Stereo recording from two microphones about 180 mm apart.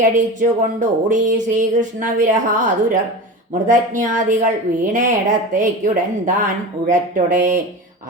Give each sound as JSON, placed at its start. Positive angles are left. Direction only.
{"t": 0.0, "sound": "speech", "side_deg": -45}